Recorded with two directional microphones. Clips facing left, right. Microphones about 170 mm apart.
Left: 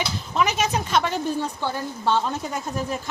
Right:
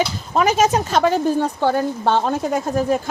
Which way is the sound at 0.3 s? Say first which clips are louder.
Right 7 dB; 45° right (ahead or behind).